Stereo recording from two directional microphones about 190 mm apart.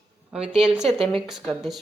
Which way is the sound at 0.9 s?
Centre (ahead or behind).